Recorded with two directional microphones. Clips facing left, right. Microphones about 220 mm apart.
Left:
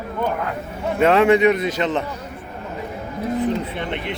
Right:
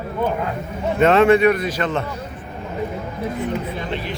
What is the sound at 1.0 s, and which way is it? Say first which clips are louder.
A man's voice: right 1 dB; 10° left (ahead or behind).